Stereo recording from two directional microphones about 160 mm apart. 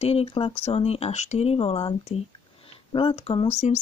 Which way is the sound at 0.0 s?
40° left (ahead or behind).